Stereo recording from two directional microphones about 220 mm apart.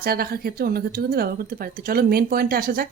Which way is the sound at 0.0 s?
45° right (ahead or behind).